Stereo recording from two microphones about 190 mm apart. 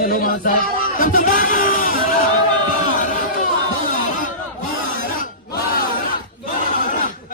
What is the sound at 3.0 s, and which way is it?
Run, 40° left (ahead or behind).